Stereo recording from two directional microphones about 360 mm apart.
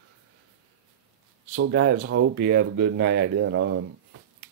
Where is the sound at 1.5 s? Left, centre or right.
Right.